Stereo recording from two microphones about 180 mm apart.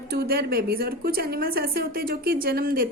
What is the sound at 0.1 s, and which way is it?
A woman's voice, 55° right (ahead or behind).